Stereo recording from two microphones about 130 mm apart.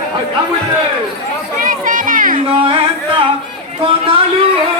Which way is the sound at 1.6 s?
90° right.